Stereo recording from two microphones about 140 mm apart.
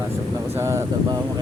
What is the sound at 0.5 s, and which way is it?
Speech, 20° right (ahead or behind).